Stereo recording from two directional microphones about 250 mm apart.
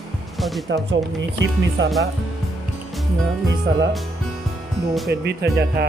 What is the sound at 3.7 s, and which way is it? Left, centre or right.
Speech, right.